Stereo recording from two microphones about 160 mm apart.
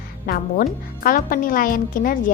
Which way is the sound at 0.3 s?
60° left (ahead or behind).